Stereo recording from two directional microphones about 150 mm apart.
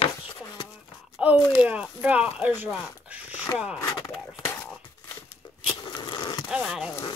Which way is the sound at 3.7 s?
25° left (ahead or behind).